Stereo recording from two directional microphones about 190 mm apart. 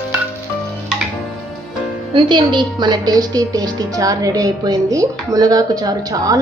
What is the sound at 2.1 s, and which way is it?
A woman's voice, 25° right (ahead or behind).